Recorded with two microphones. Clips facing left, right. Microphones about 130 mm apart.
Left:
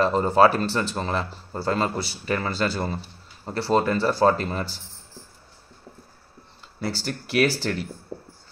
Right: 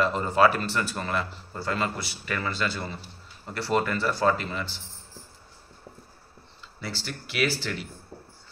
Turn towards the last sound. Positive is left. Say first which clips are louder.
# left 6 dB
turn(degrees=45)  # may be behind; listen again after turning